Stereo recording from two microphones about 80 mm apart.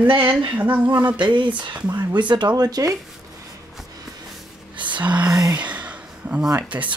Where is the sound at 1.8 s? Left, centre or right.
Right.